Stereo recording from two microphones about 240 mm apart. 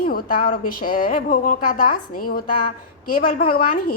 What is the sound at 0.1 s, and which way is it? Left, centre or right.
A woman's voice, left.